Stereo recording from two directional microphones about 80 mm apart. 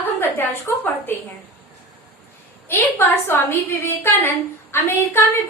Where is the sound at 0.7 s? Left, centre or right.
Left.